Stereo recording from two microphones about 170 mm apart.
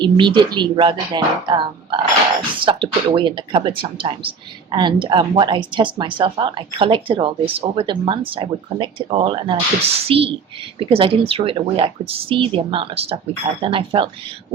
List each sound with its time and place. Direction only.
0.0 s speech: 25° right (ahead or behind)